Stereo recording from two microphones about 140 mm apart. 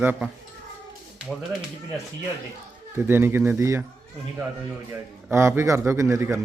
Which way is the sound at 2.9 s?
15° right (ahead or behind).